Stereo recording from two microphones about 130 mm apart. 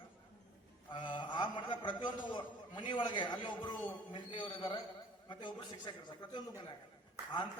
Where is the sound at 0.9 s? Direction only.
40° left (ahead or behind).